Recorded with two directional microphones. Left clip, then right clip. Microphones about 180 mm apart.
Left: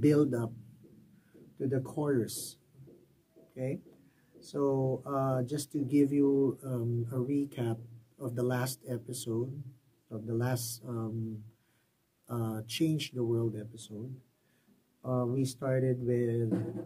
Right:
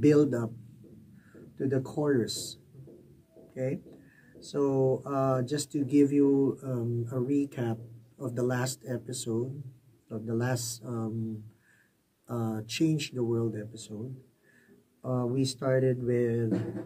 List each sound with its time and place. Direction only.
0.0 s speech: 20° left (ahead or behind)
1.6 s speech: 20° left (ahead or behind)
3.5 s speech: 20° left (ahead or behind)
12.3 s speech: 20° left (ahead or behind)